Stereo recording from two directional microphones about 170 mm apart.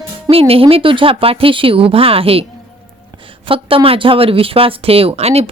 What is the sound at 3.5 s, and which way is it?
Speech, 35° right (ahead or behind).